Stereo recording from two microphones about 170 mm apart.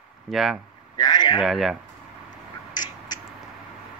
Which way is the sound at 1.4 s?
Centre (ahead or behind).